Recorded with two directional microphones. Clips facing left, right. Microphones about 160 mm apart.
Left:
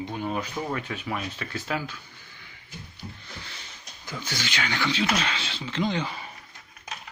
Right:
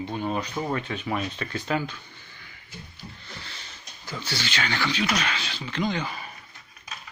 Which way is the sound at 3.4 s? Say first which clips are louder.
Right 1 dB; 15° left (ahead or behind).